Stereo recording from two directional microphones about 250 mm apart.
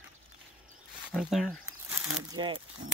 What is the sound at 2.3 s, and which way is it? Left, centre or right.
Speech, centre.